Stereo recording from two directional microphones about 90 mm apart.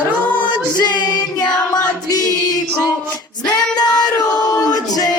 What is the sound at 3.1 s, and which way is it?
Female singing, 45° left (ahead or behind).